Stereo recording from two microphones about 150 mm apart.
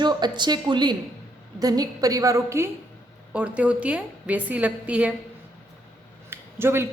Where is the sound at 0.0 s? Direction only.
30° right (ahead or behind).